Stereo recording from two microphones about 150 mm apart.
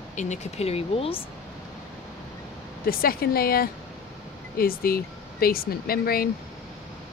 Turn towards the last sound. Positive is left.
turn(degrees=85)